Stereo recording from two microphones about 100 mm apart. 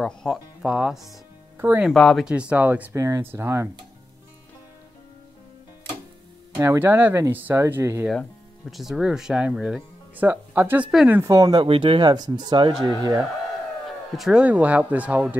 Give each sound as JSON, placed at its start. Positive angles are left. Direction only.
{"t": 0.0, "sound": "speech", "side_deg": 5}
{"t": 0.6, "sound": "speech", "side_deg": -10}
{"t": 2.5, "sound": "speech", "side_deg": -15}
{"t": 2.9, "sound": "speech", "side_deg": -30}
{"t": 6.5, "sound": "speech", "side_deg": -25}
{"t": 8.1, "sound": "speech", "side_deg": 0}
{"t": 10.1, "sound": "speech", "side_deg": -20}
{"t": 11.2, "sound": "speech", "side_deg": -35}
{"t": 11.6, "sound": "speech", "side_deg": -65}
{"t": 13.8, "sound": "a sound", "side_deg": 0}
{"t": 14.4, "sound": "speech", "side_deg": -15}